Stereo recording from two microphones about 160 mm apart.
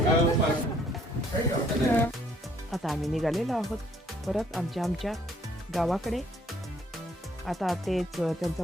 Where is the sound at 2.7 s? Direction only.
Centre (ahead or behind).